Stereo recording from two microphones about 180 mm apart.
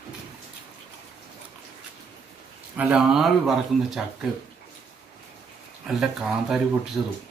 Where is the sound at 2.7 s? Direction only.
5° right (ahead or behind).